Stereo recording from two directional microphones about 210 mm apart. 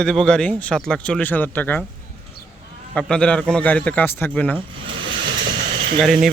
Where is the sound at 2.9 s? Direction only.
5° left (ahead or behind).